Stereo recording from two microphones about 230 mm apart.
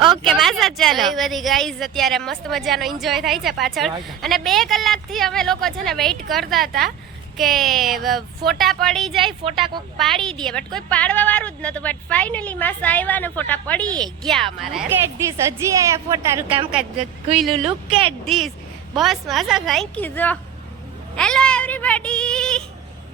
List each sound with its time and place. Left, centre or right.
0.2 s a woman's voice: centre
9.2 s a woman's voice: right
10.0 s a woman's voice: centre
15.3 s a woman's voice: centre
17.3 s a woman's voice: centre